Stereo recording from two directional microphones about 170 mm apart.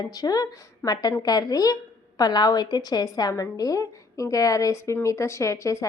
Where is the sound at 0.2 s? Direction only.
25° left (ahead or behind).